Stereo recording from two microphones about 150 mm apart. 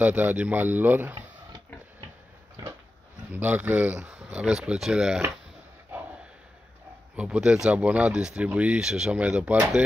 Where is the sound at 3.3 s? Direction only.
10° right (ahead or behind).